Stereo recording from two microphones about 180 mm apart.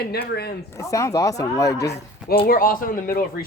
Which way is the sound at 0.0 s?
60° left (ahead or behind).